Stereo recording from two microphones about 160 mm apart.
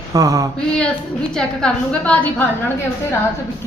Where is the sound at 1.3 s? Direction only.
5° left (ahead or behind).